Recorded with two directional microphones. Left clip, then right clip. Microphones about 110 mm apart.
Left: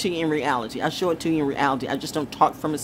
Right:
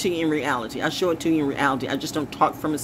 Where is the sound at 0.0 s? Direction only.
40° left (ahead or behind).